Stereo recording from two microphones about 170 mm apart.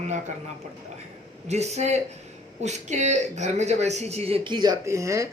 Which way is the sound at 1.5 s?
40° right (ahead or behind).